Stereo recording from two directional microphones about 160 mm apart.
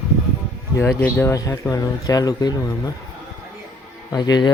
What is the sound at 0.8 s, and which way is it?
Speech, 15° left (ahead or behind).